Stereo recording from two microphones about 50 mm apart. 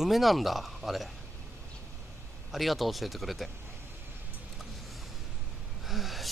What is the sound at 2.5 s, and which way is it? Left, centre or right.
A man's voice, centre.